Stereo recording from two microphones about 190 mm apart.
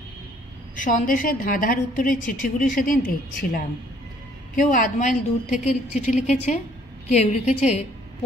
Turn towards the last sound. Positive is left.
turn(degrees=35)  # may be behind; listen again after turning